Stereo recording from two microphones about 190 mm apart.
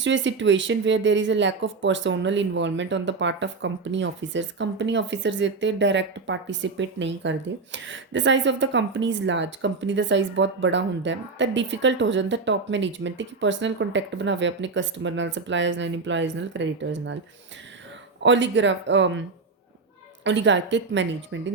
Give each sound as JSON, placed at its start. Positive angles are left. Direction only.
{"t": 0.0, "sound": "speech", "side_deg": -75}
{"t": 18.2, "sound": "speech", "side_deg": -75}
{"t": 20.2, "sound": "speech", "side_deg": -75}